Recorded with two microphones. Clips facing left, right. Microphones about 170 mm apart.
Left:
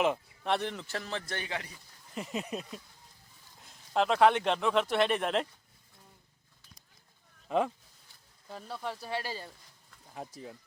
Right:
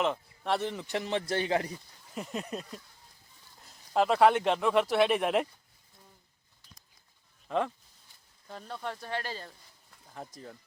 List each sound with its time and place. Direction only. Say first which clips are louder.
0.0 s speech: left 1 dB; 10° left (ahead or behind)
0.5 s a man's voice: right 2 dB; 5° right (ahead or behind); by 1.7 s 35° right (ahead or behind)
2.1 s speech: even; 5° left (ahead or behind)
7.4 s a sound: left 1 dB; 10° left (ahead or behind)
8.4 s speech: even; 5° left (ahead or behind)